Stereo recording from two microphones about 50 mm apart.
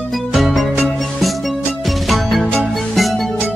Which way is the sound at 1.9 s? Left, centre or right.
Centre.